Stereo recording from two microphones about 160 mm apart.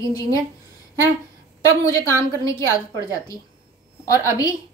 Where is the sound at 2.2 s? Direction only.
20° left (ahead or behind).